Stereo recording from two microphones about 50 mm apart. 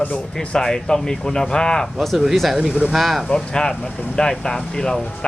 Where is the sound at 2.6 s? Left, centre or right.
Centre.